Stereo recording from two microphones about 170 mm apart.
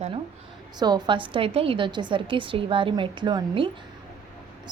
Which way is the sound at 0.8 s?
25° right (ahead or behind).